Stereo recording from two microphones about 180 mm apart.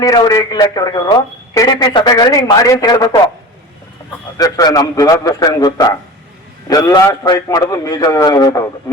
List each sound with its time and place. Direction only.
0.0 s speech: 20° left (ahead or behind)
4.4 s speech: 20° left (ahead or behind)